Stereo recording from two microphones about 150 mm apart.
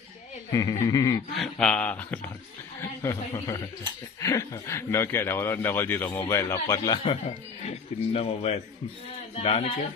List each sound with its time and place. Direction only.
0.5 s a man's voice: 20° left (ahead or behind)
1.4 s speech: 5° left (ahead or behind)
3.0 s a man's voice: 20° left (ahead or behind)
7.7 s speech: 45° left (ahead or behind)